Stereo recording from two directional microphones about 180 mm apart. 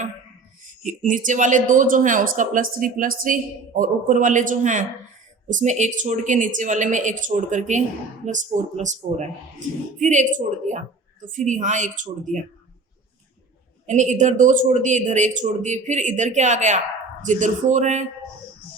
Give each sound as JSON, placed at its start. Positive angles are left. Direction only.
{"t": 0.8, "sound": "speech", "side_deg": -45}
{"t": 13.8, "sound": "speech", "side_deg": -40}